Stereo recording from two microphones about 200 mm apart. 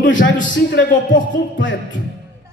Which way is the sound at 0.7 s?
55° left (ahead or behind).